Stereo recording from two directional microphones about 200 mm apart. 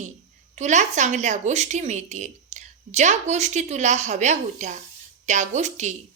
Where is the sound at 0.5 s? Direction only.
35° right (ahead or behind).